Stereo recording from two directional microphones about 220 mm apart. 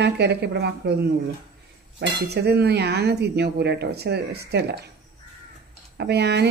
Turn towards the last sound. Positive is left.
turn(degrees=-50)  # may be behind; listen again after turning